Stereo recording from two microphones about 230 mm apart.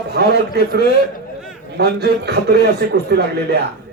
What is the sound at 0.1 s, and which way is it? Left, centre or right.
Speech, right.